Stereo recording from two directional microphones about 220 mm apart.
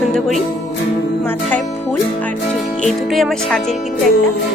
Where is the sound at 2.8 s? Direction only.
Centre (ahead or behind).